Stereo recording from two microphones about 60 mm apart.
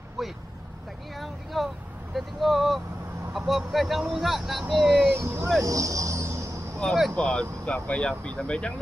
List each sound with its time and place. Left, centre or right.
0.2 s speech: centre
1.1 s a sound: centre
2.1 s speech: centre
5.1 s speech: right
5.6 s vehicle: right
6.8 s speech: centre